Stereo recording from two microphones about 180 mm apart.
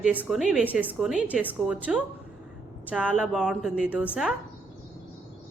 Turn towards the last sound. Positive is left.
turn(degrees=-5)  # may be behind; listen again after turning